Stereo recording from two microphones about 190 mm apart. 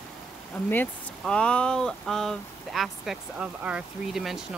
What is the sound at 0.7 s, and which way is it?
Speech, 10° left (ahead or behind).